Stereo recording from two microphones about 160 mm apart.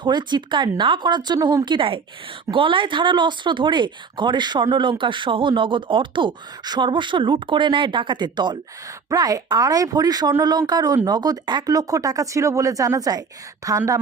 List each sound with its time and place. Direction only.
0.0 s speech: 30° right (ahead or behind)